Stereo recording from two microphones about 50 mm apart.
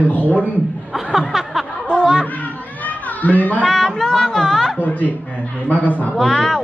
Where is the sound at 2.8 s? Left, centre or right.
Left.